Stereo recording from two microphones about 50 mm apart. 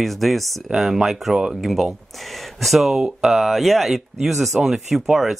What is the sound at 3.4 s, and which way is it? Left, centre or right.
Speech, centre.